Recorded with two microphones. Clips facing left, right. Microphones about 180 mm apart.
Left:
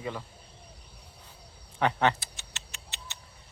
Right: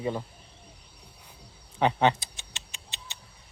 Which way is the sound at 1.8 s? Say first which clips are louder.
Right 3 dB; 20° right (ahead or behind).